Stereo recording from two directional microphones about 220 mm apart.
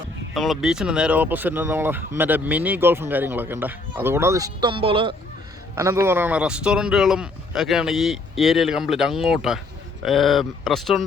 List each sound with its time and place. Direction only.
0.3 s speech: centre (ahead or behind); by 5.1 s 25° right (ahead or behind)
5.7 s speech: 10° right (ahead or behind)